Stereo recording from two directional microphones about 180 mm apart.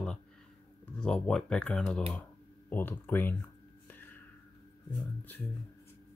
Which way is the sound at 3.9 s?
10° left (ahead or behind).